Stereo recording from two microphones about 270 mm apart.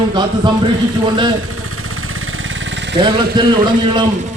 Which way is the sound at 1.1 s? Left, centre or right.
Centre.